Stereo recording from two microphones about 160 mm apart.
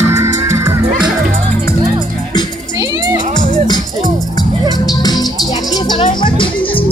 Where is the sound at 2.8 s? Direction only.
20° right (ahead or behind).